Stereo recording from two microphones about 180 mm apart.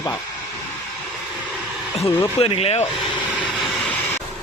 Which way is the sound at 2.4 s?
30° left (ahead or behind).